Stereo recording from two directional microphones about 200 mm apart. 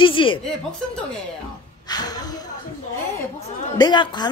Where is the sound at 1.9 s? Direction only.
20° left (ahead or behind).